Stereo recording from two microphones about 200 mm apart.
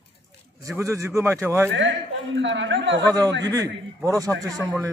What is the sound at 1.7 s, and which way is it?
A man's voice, 65° right (ahead or behind).